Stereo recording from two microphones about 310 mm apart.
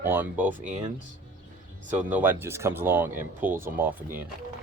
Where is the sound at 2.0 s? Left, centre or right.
Centre.